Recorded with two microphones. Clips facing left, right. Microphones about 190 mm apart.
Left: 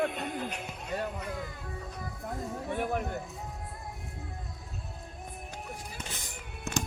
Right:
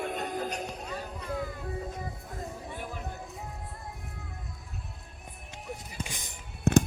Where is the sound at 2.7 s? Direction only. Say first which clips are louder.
Left 8 dB; 65° left (ahead or behind).